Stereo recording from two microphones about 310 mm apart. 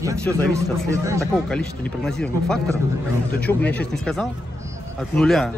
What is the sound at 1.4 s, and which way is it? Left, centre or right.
A man's voice, centre.